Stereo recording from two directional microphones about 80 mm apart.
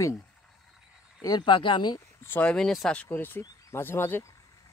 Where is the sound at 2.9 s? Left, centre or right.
Centre.